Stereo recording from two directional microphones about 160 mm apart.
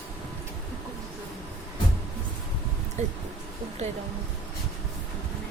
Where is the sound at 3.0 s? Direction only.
45° right (ahead or behind).